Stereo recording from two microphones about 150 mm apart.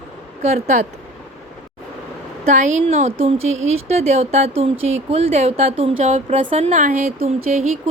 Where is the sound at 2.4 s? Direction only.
55° right (ahead or behind).